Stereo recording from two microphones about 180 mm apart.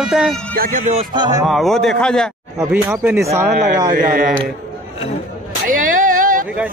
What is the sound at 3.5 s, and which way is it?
Speech, 45° right (ahead or behind).